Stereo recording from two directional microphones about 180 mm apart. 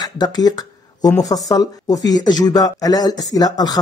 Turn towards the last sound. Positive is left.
turn(degrees=20)  # may be behind; listen again after turning